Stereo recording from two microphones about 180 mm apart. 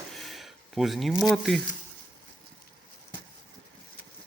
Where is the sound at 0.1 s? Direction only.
Centre (ahead or behind).